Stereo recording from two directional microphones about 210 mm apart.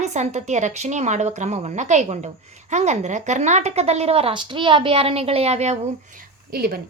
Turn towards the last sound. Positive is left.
turn(degrees=-45)  # may be behind; listen again after turning